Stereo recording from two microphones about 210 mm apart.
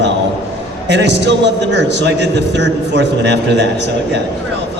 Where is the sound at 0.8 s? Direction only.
55° right (ahead or behind).